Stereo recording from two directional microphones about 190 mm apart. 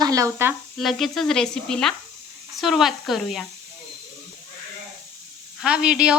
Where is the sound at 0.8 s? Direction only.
Centre (ahead or behind).